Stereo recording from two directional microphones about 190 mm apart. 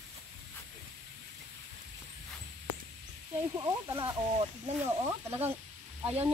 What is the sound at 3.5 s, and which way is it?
Speech, 20° right (ahead or behind).